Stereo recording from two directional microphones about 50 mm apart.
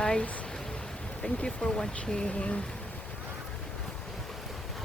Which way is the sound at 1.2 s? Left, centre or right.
Centre.